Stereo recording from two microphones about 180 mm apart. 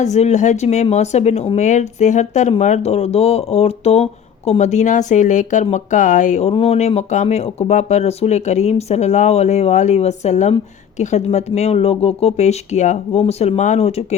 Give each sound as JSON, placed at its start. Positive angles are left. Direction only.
{"t": 0.0, "sound": "speech", "side_deg": 40}